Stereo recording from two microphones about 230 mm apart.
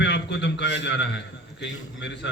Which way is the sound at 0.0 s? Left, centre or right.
Left.